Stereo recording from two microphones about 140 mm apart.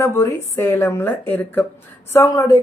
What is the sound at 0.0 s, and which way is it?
Speech, 20° left (ahead or behind).